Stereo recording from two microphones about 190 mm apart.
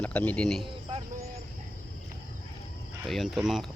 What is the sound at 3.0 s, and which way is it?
Speech, centre (ahead or behind).